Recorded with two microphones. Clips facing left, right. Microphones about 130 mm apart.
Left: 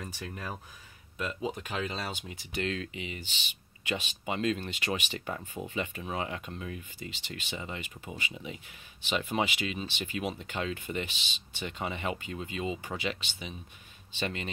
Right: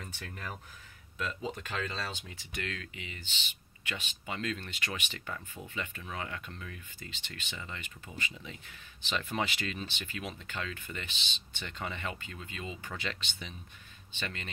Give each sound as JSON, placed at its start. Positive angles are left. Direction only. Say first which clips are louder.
{"t": 0.0, "sound": "speech", "louder": "left 4 dB", "side_deg": 25}
{"t": 1.1, "sound": "speech", "louder": "left 3 dB", "side_deg": 15}
{"t": 2.5, "sound": "speech", "louder": "left 7 dB", "side_deg": 25}
{"t": 7.0, "sound": "speech", "louder": "left 5 dB", "side_deg": 15}
{"t": 14.1, "sound": "speech", "louder": "left 6 dB", "side_deg": 20}